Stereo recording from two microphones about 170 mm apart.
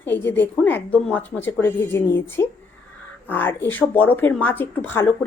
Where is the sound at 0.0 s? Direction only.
10° left (ahead or behind).